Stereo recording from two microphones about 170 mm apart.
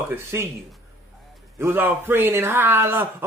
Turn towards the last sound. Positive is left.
turn(degrees=-15)  # may be behind; listen again after turning